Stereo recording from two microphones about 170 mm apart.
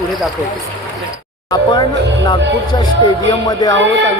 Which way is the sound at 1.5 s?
25° left (ahead or behind).